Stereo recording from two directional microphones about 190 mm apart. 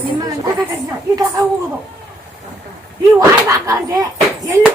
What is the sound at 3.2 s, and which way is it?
Speech, 15° right (ahead or behind).